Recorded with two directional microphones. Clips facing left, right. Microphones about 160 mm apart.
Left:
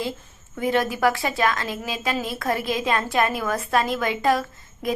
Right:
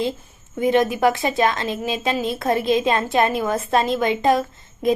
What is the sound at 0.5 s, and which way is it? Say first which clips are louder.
A woman's voice: right 5 dB; 20° right (ahead or behind).